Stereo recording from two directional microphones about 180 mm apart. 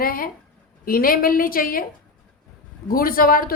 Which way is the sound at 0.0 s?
55° left (ahead or behind).